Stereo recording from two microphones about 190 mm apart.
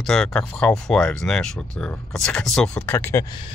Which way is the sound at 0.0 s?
5° left (ahead or behind).